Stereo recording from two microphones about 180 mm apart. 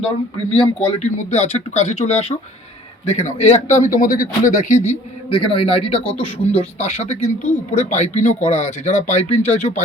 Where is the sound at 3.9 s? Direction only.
50° left (ahead or behind).